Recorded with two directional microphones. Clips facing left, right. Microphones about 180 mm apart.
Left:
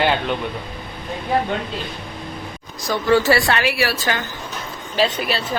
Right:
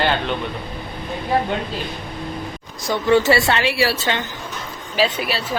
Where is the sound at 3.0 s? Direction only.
20° right (ahead or behind).